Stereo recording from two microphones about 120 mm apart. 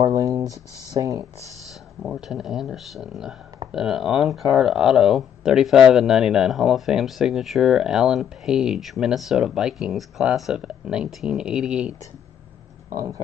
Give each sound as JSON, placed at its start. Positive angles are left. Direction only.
{"t": 0.1, "sound": "speech", "side_deg": -30}
{"t": 2.0, "sound": "speech", "side_deg": -5}
{"t": 12.9, "sound": "speech", "side_deg": -30}